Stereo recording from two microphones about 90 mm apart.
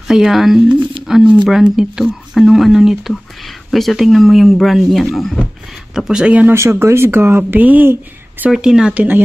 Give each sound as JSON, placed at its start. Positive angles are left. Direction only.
{"t": 0.1, "sound": "speech", "side_deg": -5}
{"t": 6.3, "sound": "speech", "side_deg": -25}
{"t": 8.5, "sound": "speech", "side_deg": -5}